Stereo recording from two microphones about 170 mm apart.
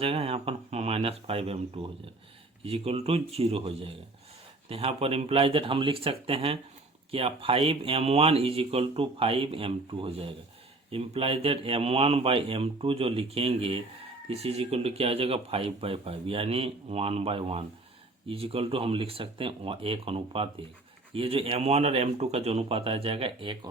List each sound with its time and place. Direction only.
0.0 s speech: 35° right (ahead or behind)